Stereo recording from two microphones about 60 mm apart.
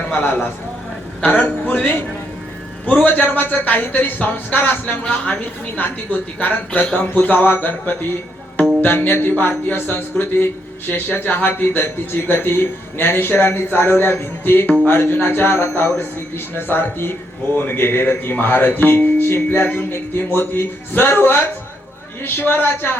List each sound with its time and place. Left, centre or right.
0.1 s speech: left
1.2 s a man's voice: left